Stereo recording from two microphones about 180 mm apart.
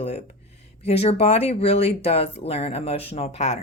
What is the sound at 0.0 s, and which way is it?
A woman's voice, 35° left (ahead or behind).